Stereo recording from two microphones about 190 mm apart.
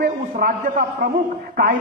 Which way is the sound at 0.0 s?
45° right (ahead or behind).